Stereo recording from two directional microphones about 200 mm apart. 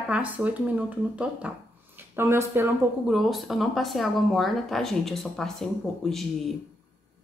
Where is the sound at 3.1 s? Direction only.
Centre (ahead or behind).